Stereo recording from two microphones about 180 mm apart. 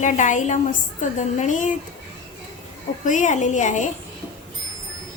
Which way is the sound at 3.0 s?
45° left (ahead or behind).